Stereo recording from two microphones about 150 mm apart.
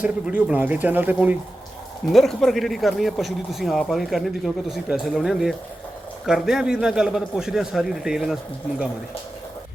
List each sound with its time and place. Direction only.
0.0 s speech: 10° right (ahead or behind)
2.1 s speech: centre (ahead or behind)